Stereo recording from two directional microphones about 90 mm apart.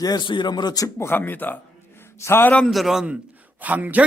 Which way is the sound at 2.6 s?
Centre (ahead or behind).